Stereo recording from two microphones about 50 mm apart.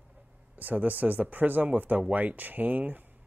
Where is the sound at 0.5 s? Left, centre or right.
Right.